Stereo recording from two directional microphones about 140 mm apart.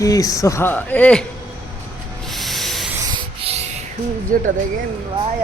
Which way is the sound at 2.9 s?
25° right (ahead or behind).